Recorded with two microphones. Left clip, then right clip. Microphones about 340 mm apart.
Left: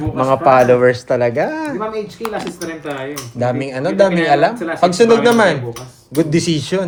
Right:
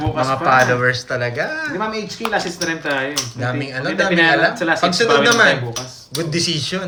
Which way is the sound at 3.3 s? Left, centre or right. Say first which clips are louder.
Left 5 dB; centre.